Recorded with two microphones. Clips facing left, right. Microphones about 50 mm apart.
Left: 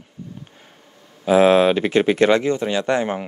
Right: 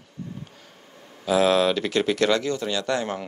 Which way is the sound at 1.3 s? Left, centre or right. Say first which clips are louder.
Left 6 dB; left.